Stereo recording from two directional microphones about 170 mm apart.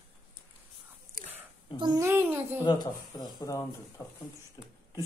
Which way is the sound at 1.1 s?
55° right (ahead or behind).